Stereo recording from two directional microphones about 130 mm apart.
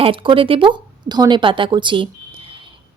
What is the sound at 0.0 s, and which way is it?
Speech, 40° right (ahead or behind).